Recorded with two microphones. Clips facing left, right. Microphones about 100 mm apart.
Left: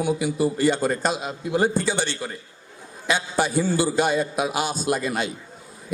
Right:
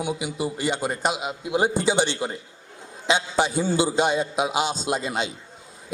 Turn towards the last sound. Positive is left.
turn(degrees=-20)  # may be behind; listen again after turning